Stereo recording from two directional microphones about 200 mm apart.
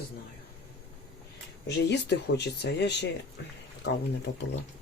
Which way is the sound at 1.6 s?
60° left (ahead or behind).